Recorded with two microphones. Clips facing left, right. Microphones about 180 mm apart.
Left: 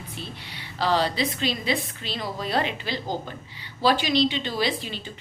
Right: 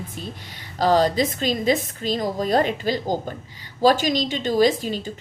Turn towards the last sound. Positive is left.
turn(degrees=-45)  # may be behind; listen again after turning